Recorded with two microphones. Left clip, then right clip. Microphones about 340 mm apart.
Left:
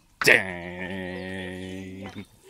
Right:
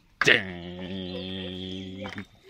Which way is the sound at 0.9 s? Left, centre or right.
Left.